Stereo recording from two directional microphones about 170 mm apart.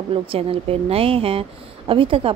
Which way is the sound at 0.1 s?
35° right (ahead or behind).